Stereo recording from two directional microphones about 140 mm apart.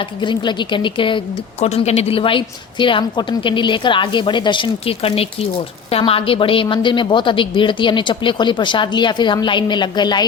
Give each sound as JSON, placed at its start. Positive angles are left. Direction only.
{"t": 0.2, "sound": "a woman's voice", "side_deg": 35}
{"t": 1.6, "sound": "a woman's voice", "side_deg": 50}